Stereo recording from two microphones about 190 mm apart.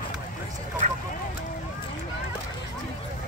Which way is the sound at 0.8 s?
40° right (ahead or behind).